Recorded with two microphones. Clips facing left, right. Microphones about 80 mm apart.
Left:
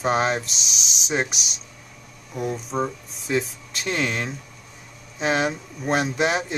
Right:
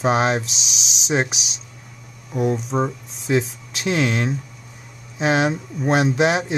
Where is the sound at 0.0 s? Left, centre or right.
Centre.